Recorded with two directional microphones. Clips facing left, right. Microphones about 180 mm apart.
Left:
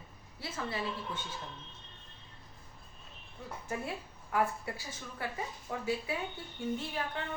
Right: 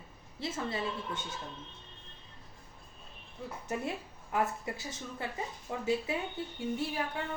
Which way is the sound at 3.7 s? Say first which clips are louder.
Right 2 dB; 20° right (ahead or behind).